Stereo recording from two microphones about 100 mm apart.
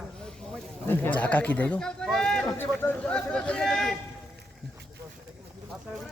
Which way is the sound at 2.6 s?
20° left (ahead or behind).